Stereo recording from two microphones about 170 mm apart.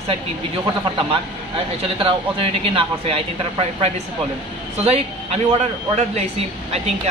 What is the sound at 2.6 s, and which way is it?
A woman's voice, 35° right (ahead or behind).